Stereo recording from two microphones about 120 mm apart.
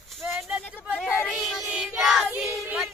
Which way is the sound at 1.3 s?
5° right (ahead or behind).